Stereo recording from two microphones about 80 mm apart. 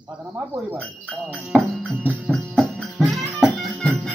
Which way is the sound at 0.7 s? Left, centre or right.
Centre.